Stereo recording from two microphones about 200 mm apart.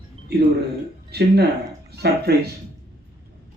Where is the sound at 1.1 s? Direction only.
55° right (ahead or behind).